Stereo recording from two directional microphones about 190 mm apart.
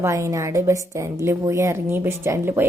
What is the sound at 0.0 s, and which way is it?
A woman's voice, 15° right (ahead or behind).